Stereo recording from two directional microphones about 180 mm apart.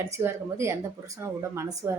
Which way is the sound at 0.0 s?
15° right (ahead or behind).